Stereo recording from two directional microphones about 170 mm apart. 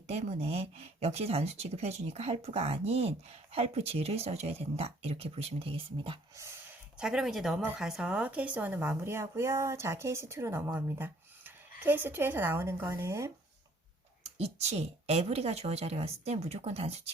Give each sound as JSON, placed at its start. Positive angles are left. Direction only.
{"t": 0.1, "sound": "speech", "side_deg": -40}
{"t": 6.9, "sound": "speech", "side_deg": -5}
{"t": 14.3, "sound": "speech", "side_deg": -40}